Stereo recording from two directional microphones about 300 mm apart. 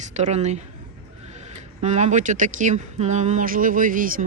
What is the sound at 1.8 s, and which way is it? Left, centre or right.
Speech, right.